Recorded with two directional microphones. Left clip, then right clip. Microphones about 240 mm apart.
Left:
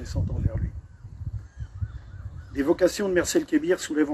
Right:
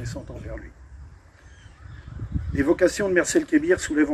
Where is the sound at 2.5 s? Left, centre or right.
Left.